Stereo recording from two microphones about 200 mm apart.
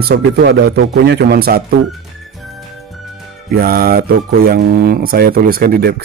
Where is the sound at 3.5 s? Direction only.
50° right (ahead or behind).